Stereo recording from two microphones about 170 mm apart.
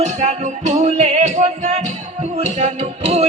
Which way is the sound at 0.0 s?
40° right (ahead or behind).